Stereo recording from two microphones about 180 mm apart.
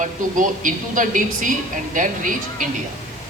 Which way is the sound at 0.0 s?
45° right (ahead or behind).